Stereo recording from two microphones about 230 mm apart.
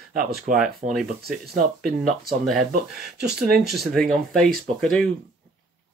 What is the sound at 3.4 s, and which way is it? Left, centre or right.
Speech, centre.